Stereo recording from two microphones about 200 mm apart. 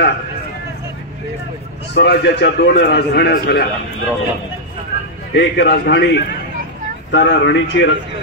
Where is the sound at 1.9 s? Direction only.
55° left (ahead or behind).